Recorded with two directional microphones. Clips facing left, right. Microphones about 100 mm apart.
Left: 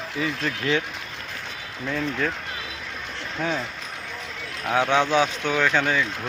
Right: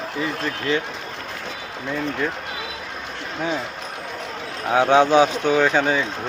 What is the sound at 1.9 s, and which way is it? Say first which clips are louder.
Speech: right 1 dB; 5° right (ahead or behind).